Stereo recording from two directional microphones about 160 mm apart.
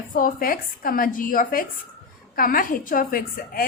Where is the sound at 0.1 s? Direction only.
60° left (ahead or behind).